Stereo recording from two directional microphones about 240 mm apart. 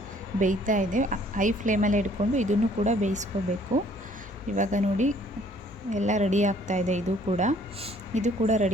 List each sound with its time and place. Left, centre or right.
0.3 s a woman's voice: right
4.5 s a woman's voice: right